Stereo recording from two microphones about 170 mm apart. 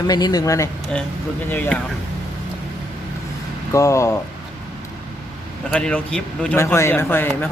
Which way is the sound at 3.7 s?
15° left (ahead or behind).